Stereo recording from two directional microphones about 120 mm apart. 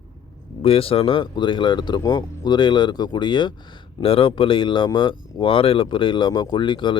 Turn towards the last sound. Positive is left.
turn(degrees=40)  # may be behind; listen again after turning